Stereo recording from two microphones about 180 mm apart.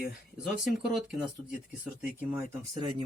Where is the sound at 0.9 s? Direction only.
Centre (ahead or behind).